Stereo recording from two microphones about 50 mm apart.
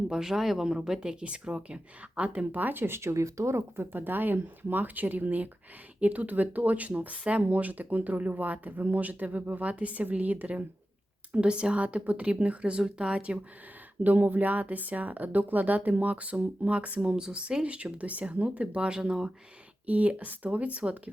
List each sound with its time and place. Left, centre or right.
0.1 s speech: centre; by 3.6 s right
3.8 s speech: right
11.3 s speech: centre
14.0 s speech: right; by 19.3 s centre
19.9 s speech: right